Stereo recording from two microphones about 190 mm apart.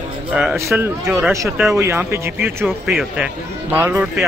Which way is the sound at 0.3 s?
5° right (ahead or behind).